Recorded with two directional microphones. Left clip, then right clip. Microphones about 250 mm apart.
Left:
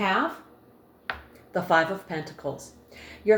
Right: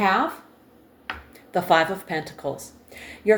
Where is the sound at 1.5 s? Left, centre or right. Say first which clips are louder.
Right 3 dB; right.